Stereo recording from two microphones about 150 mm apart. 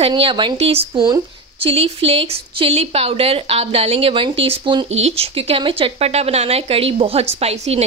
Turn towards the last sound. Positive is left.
turn(degrees=-45)  # may be behind; listen again after turning